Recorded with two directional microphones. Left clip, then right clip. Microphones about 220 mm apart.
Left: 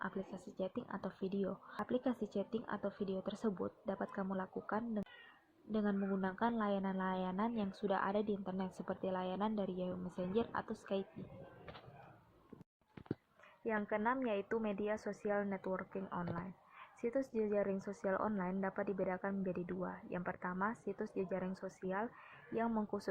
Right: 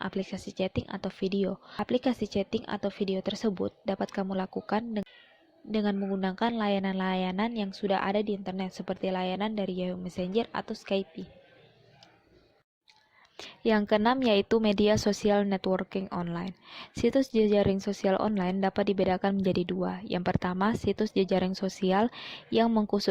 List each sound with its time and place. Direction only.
0.0 s a woman's voice: 30° right (ahead or behind)
13.3 s a woman's voice: 50° right (ahead or behind)
22.7 s speech: 35° right (ahead or behind)